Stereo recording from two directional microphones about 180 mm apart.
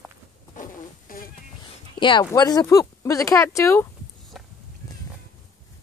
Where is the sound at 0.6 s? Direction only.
50° left (ahead or behind).